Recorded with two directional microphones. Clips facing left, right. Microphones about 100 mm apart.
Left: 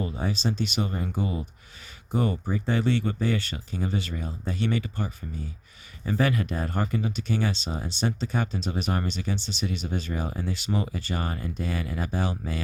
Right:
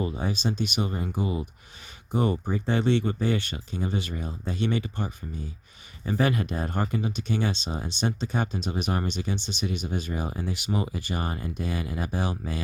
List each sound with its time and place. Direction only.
0.0 s speech: 15° right (ahead or behind)
6.2 s speech: 20° right (ahead or behind)